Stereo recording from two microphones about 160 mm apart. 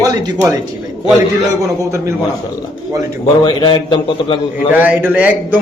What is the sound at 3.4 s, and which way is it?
Speech, 30° left (ahead or behind).